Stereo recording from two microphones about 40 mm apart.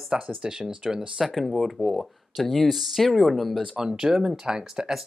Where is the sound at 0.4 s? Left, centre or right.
Centre.